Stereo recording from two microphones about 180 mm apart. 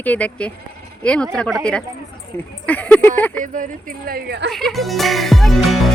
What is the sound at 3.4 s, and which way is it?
Speech, 45° right (ahead or behind).